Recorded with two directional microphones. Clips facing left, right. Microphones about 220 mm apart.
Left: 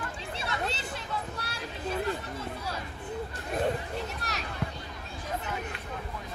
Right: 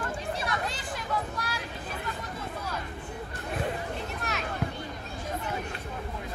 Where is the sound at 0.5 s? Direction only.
25° left (ahead or behind).